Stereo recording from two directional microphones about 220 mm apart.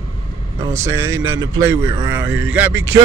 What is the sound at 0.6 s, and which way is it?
Speech, 10° right (ahead or behind).